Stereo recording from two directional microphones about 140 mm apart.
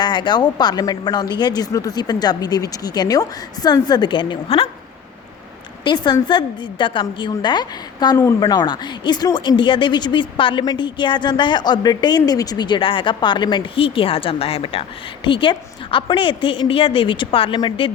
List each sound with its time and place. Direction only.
0.0 s a woman's voice: 30° left (ahead or behind)
5.8 s a woman's voice: 30° left (ahead or behind)